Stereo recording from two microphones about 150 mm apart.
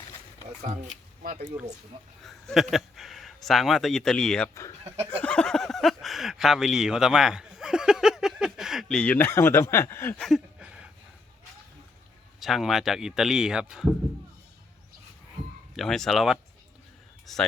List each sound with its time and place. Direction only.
2.2 s speech: centre (ahead or behind)
4.8 s speech: 35° right (ahead or behind)
5.2 s speech: 5° left (ahead or behind)
10.2 s a sound: centre (ahead or behind)
12.4 s speech: centre (ahead or behind)
15.7 s speech: centre (ahead or behind)